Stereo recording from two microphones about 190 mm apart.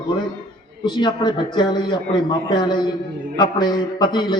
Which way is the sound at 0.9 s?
25° left (ahead or behind).